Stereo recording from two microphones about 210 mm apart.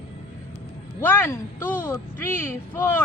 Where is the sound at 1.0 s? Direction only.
10° left (ahead or behind).